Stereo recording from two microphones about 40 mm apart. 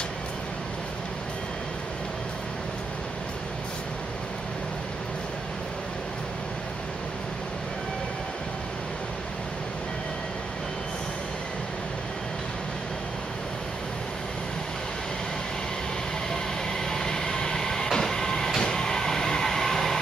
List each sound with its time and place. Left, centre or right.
16.9 s vehicle: centre